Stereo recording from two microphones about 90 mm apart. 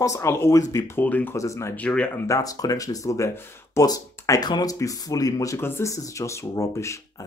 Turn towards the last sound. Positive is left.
turn(degrees=35)  # may be behind; listen again after turning